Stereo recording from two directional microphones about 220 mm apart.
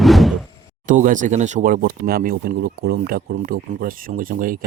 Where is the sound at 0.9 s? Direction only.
35° right (ahead or behind).